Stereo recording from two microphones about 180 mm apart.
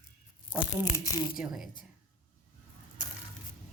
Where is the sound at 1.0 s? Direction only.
20° left (ahead or behind).